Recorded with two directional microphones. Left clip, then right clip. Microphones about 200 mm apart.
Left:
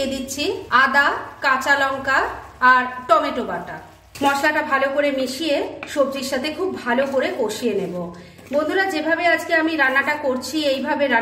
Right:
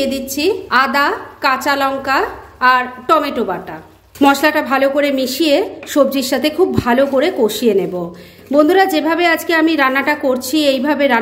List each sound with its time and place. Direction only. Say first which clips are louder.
0.0 s a woman's voice: right 7 dB; 40° right (ahead or behind)
4.2 s a woman's voice: right 6 dB; 50° right (ahead or behind)